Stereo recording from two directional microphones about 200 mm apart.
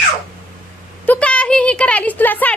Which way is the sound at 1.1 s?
5° left (ahead or behind).